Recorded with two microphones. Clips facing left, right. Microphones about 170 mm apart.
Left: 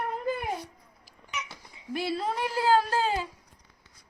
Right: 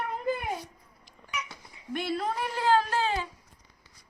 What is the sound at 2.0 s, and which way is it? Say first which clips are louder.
Speech: left 1 dB; 30° left (ahead or behind).